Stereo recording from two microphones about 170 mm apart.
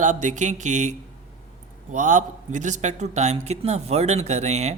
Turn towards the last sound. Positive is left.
turn(degrees=-40)  # may be behind; listen again after turning